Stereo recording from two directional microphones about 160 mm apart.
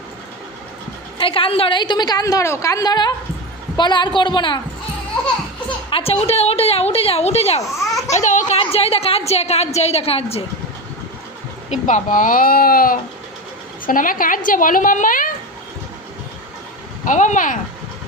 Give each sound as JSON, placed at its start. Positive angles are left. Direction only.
{"t": 1.2, "sound": "a woman's voice", "side_deg": 35}
{"t": 5.9, "sound": "a woman's voice", "side_deg": 35}
{"t": 8.5, "sound": "a woman's voice", "side_deg": 35}
{"t": 11.7, "sound": "a woman's voice", "side_deg": 50}
{"t": 17.1, "sound": "speech", "side_deg": 50}